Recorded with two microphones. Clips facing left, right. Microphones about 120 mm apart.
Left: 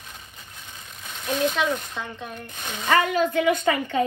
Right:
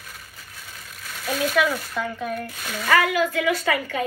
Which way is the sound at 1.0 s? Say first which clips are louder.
Left 1 dB; 20° left (ahead or behind).